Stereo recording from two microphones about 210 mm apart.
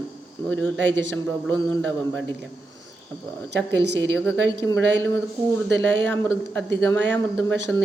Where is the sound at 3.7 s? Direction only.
55° right (ahead or behind).